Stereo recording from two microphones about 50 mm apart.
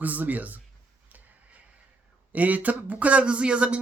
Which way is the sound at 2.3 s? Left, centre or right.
Right.